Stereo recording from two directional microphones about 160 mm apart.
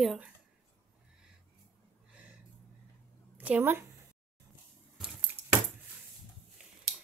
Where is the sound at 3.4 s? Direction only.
10° right (ahead or behind).